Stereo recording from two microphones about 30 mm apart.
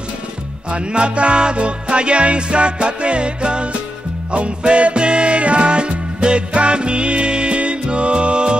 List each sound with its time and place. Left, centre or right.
0.7 s music: right